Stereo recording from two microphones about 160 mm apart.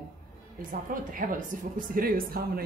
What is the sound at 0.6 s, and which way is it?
A woman's voice, 60° right (ahead or behind).